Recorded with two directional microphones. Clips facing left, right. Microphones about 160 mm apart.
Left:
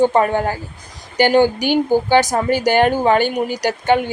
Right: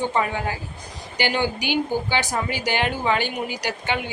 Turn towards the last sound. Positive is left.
turn(degrees=45)  # may be behind; listen again after turning